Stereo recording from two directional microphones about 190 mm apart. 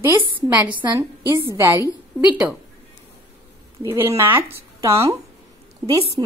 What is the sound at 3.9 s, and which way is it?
Speech, 15° right (ahead or behind).